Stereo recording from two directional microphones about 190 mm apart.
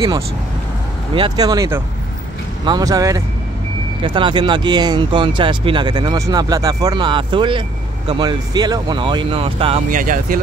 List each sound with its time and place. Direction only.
1.1 s speech: 25° right (ahead or behind)
9.8 s speech: 45° right (ahead or behind)